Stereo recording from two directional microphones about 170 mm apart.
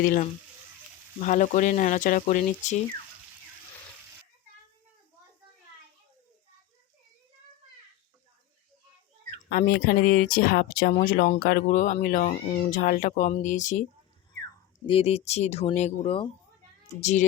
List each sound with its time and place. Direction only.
0.0 s speech: 55° left (ahead or behind)
1.2 s speech: 45° left (ahead or behind)
9.5 s speech: 60° left (ahead or behind)
14.8 s speech: 35° left (ahead or behind)
17.0 s speech: 45° left (ahead or behind)